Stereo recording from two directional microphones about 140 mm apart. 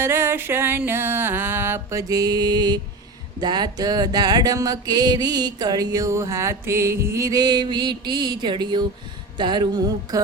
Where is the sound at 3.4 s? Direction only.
30° right (ahead or behind).